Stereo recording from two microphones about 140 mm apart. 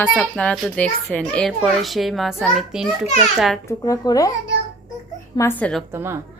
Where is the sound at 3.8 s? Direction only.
25° left (ahead or behind).